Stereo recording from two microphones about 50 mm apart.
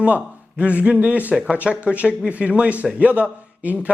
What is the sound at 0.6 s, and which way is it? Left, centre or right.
Speech, right.